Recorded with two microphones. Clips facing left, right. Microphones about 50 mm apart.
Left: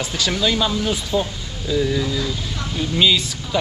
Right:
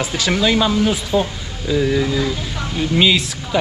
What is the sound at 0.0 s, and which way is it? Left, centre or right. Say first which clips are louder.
Speech: right 3 dB; centre.